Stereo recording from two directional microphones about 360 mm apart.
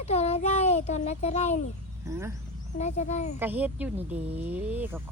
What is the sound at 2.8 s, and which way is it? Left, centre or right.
Speech, centre.